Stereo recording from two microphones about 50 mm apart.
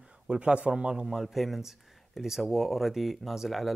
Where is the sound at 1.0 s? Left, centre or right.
Centre.